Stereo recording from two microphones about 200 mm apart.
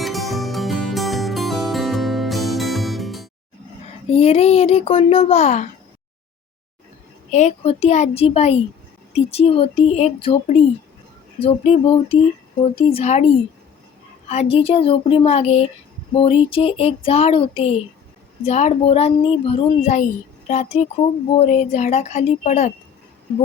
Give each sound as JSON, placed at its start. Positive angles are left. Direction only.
{"t": 0.0, "sound": "music", "side_deg": 0}
{"t": 4.1, "sound": "speech", "side_deg": 30}
{"t": 7.3, "sound": "speech", "side_deg": 35}
{"t": 9.1, "sound": "child singing", "side_deg": 30}
{"t": 12.6, "sound": "speech", "side_deg": 30}
{"t": 14.3, "sound": "child singing", "side_deg": 30}
{"t": 18.4, "sound": "speech", "side_deg": 30}